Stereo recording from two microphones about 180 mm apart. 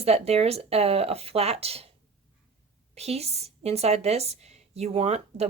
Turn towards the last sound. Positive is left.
turn(degrees=-35)  # may be behind; listen again after turning